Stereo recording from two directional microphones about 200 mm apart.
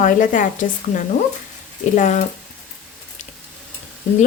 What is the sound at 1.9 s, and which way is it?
Speech, 35° left (ahead or behind).